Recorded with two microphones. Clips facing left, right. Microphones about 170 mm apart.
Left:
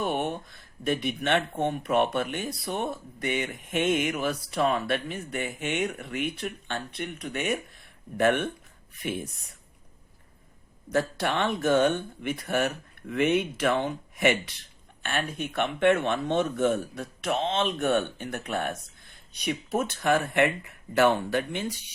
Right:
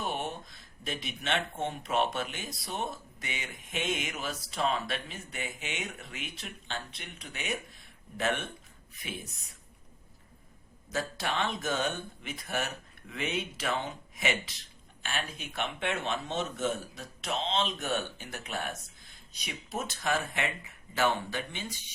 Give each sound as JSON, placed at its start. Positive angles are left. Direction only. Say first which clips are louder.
{"t": 0.0, "sound": "speech", "louder": "left 7 dB", "side_deg": 55}
{"t": 10.9, "sound": "speech", "louder": "left 6 dB", "side_deg": 60}